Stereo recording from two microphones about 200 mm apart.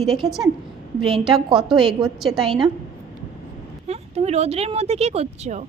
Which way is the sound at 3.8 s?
30° right (ahead or behind).